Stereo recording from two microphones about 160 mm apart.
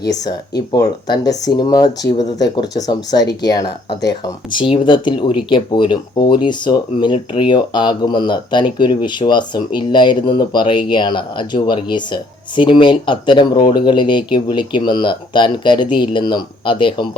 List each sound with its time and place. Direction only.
0.1 s speech: 25° left (ahead or behind)